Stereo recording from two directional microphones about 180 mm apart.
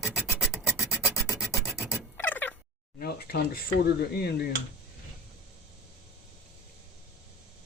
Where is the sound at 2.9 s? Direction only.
60° left (ahead or behind).